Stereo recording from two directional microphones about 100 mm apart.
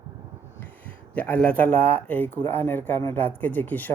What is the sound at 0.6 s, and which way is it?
A man's voice, 15° left (ahead or behind).